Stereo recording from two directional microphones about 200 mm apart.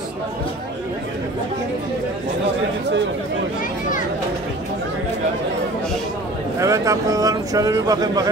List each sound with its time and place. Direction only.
6.6 s speech: 15° right (ahead or behind)